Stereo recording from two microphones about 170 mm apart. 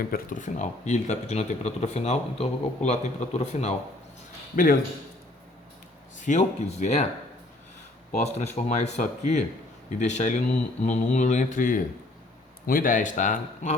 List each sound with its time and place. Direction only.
0.0 s speech: 55° left (ahead or behind)
4.5 s a man's voice: 55° left (ahead or behind)
6.1 s speech: 45° left (ahead or behind)
8.5 s speech: 40° left (ahead or behind)